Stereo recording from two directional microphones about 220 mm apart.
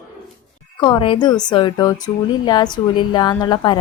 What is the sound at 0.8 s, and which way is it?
A woman's voice, 20° left (ahead or behind).